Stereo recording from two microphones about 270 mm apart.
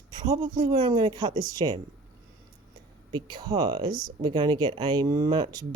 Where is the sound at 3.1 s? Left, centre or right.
Centre.